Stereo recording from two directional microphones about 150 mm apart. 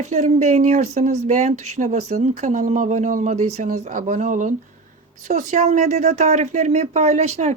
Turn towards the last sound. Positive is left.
turn(degrees=-45)  # may be behind; listen again after turning